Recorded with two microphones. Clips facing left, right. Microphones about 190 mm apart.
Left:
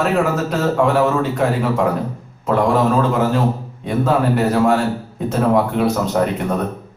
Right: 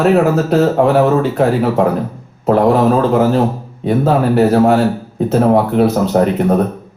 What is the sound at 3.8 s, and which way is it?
Speech, 35° right (ahead or behind).